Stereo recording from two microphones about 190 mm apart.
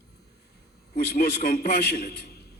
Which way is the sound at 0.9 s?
55° left (ahead or behind).